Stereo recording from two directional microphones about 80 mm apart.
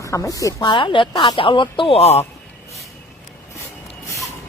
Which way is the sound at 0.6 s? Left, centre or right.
Left.